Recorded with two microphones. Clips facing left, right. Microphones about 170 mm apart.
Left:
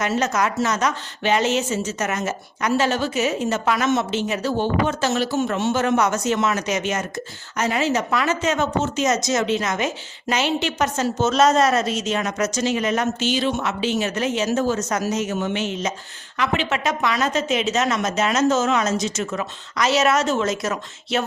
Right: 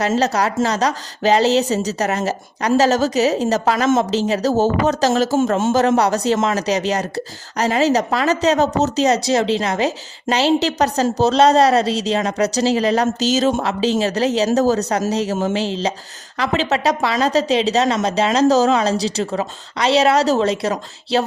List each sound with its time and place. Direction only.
0.0 s a woman's voice: 35° right (ahead or behind)
5.8 s a woman's voice: 35° right (ahead or behind)